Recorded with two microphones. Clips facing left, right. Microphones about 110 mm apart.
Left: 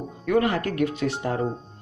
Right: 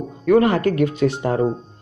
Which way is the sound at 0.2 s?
50° right (ahead or behind).